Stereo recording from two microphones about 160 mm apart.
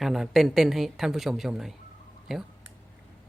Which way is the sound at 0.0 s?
Centre (ahead or behind).